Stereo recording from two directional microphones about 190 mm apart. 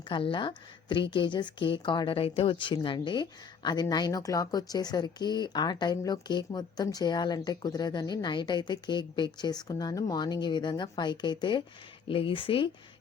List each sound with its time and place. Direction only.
0.1 s a woman's voice: 25° left (ahead or behind)